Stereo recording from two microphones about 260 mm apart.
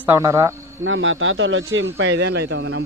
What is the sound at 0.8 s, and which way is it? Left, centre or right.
Speech, right.